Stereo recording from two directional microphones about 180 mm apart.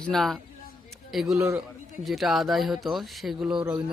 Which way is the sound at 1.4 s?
15° right (ahead or behind).